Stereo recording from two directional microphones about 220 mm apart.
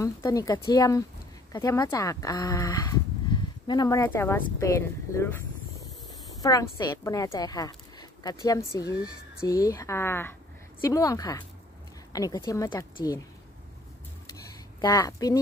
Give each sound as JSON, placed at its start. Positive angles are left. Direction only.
{"t": 0.0, "sound": "speech", "side_deg": 15}
{"t": 6.4, "sound": "speech", "side_deg": 15}
{"t": 14.8, "sound": "speech", "side_deg": 15}